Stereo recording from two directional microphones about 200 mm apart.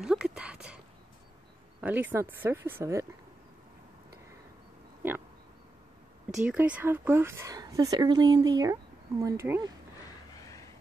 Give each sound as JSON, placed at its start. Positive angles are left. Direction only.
{"t": 0.0, "sound": "a sound", "side_deg": -5}
{"t": 1.8, "sound": "speech", "side_deg": -10}
{"t": 6.4, "sound": "speech", "side_deg": -5}
{"t": 10.3, "sound": "vehicle", "side_deg": 15}